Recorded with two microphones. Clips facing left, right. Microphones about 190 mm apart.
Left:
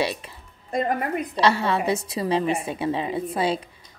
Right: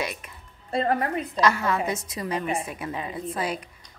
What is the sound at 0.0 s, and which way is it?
Speech, 30° left (ahead or behind).